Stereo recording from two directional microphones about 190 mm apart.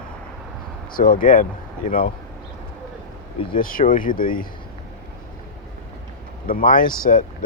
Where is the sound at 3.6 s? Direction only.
45° left (ahead or behind).